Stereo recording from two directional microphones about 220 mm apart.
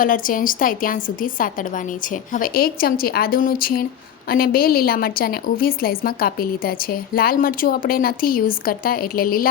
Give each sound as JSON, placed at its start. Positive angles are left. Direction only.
{"t": 0.0, "sound": "a woman's voice", "side_deg": 40}